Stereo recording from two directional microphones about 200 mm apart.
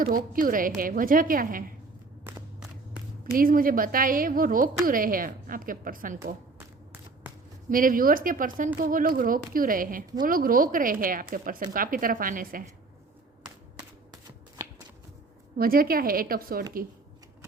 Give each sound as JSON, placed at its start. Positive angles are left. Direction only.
{"t": 0.3, "sound": "a woman's voice", "side_deg": -45}
{"t": 3.3, "sound": "a woman's voice", "side_deg": -45}
{"t": 7.7, "sound": "a woman's voice", "side_deg": -45}
{"t": 15.5, "sound": "a woman's voice", "side_deg": -45}